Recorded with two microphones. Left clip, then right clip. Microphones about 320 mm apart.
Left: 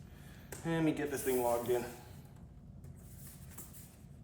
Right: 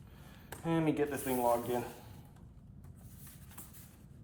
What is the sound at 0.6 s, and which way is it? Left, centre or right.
Speech, centre.